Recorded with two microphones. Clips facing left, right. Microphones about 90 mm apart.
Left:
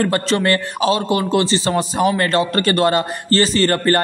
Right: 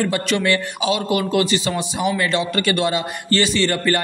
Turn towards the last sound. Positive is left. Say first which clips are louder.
# left 3 dB
turn(degrees=40)  # may be behind; listen again after turning